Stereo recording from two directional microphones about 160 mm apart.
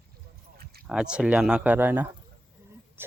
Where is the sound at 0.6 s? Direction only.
75° right (ahead or behind).